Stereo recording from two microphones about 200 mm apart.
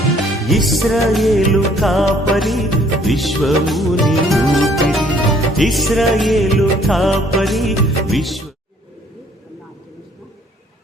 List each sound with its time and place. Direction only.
0.4 s music: centre (ahead or behind)